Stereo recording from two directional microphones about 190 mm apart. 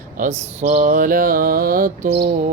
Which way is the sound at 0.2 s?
45° right (ahead or behind).